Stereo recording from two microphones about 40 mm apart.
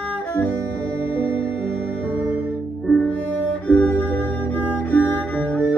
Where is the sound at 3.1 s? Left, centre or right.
Left.